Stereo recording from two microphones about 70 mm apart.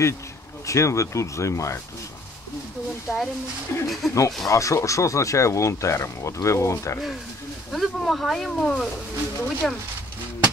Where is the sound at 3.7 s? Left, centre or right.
Left.